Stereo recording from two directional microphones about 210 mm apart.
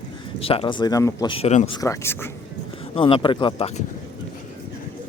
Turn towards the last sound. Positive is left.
turn(degrees=30)  # may be behind; listen again after turning